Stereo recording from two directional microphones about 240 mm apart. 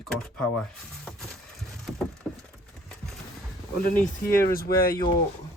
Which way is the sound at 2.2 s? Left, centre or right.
Centre.